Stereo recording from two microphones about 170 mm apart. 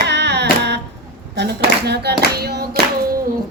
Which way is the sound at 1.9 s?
75° right (ahead or behind).